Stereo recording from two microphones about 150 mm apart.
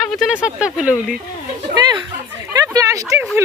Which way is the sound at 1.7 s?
30° right (ahead or behind).